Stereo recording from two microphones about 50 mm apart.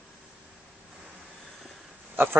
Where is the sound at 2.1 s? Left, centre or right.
Right.